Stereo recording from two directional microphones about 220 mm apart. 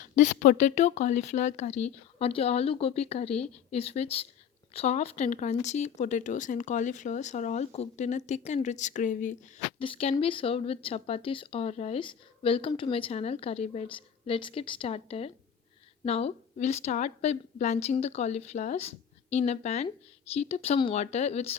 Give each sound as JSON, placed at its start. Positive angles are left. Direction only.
{"t": 0.2, "sound": "speech", "side_deg": 35}
{"t": 9.7, "sound": "speech", "side_deg": 25}